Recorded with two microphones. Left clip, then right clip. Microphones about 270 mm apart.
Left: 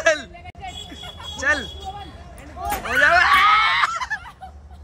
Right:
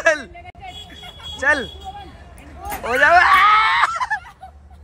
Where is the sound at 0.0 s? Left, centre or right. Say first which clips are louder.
Right 2 dB; centre.